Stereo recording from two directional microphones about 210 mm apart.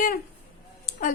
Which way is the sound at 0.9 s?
40° left (ahead or behind).